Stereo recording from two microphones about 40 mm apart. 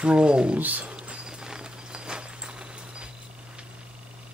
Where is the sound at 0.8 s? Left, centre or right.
Right.